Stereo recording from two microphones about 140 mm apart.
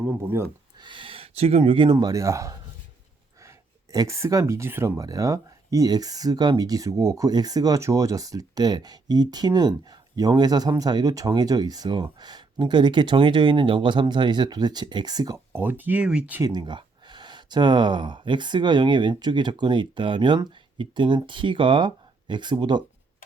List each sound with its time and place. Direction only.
0.0 s speech: 15° right (ahead or behind)
0.8 s speech: 35° right (ahead or behind)
3.9 s speech: 20° right (ahead or behind)
15.5 s speech: 15° right (ahead or behind)
16.4 s speech: 30° right (ahead or behind)